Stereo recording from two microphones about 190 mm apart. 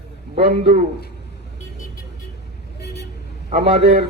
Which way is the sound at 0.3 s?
30° right (ahead or behind).